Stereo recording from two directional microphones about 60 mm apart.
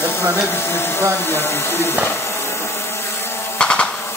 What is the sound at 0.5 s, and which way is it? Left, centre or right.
Speech, left.